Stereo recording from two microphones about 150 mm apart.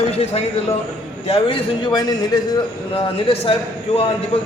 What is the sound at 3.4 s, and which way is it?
Speech, 40° left (ahead or behind).